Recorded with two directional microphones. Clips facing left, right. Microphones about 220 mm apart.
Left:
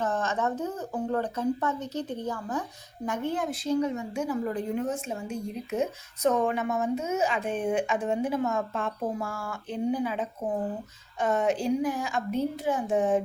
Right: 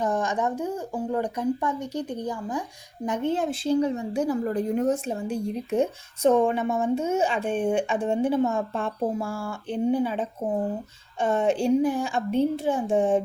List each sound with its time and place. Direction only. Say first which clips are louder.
0.0 s a woman's voice: right 3 dB; 15° right (ahead or behind)
3.1 s a woman's voice: right 4 dB; 25° right (ahead or behind)